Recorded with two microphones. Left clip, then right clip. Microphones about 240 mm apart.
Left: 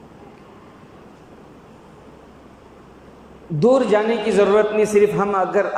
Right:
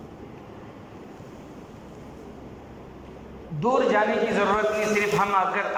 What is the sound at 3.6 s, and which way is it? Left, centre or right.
A man's voice, left.